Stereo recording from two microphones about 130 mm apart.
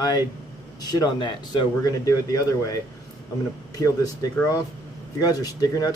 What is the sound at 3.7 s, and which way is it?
Speech, 25° left (ahead or behind).